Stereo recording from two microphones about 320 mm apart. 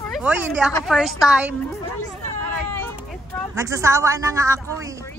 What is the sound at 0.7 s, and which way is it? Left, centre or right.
Speech, centre.